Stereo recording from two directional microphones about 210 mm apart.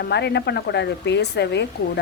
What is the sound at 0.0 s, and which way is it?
Speech, 55° left (ahead or behind).